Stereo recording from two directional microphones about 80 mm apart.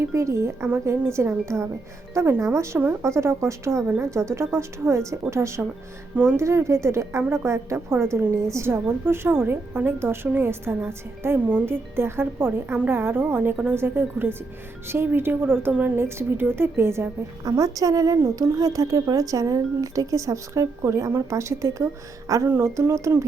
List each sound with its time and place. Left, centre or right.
0.0 s a woman's voice: right
17.4 s speech: right